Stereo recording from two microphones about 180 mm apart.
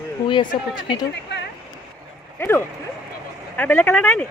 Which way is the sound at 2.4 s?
10° left (ahead or behind).